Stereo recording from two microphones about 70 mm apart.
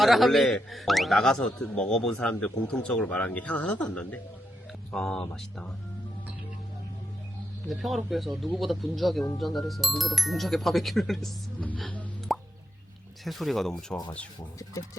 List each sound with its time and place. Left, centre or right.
0.0 s a man's voice: centre
7.7 s speech: centre
12.3 s plop: centre
13.2 s speech: centre